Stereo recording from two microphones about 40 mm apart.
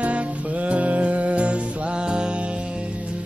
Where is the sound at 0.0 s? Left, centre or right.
Right.